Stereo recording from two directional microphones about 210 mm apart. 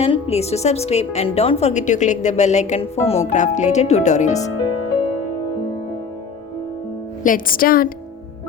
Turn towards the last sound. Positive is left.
turn(degrees=45)  # may be behind; listen again after turning